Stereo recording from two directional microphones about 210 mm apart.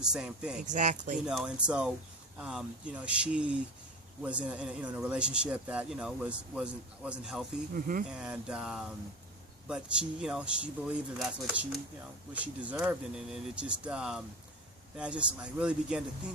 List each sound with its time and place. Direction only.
0.0 s speech: 5° right (ahead or behind)
0.6 s speech: 35° right (ahead or behind)
1.2 s speech: 5° right (ahead or behind)
7.7 s speech: 40° right (ahead or behind)
8.1 s speech: 5° right (ahead or behind)